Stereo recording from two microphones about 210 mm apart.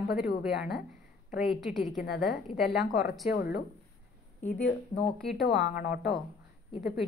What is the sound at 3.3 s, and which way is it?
Speech, 50° left (ahead or behind).